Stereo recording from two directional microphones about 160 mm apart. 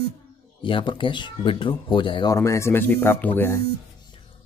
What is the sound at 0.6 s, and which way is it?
A man's voice, 30° left (ahead or behind).